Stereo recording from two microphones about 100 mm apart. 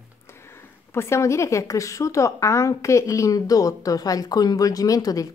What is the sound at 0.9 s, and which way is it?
A woman's voice, 30° left (ahead or behind).